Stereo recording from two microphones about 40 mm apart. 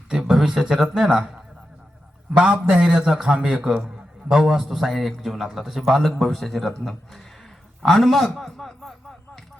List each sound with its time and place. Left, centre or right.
0.1 s a man's voice: centre
2.3 s a man's voice: right
2.8 s a man's voice: centre